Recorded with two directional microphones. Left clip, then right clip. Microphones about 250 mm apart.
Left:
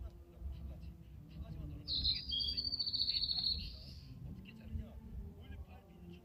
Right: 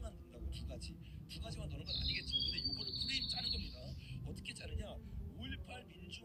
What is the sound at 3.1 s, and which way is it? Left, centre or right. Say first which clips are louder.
Cricket: left 3 dB; right.